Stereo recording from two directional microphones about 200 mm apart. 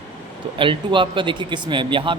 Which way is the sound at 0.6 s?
25° right (ahead or behind).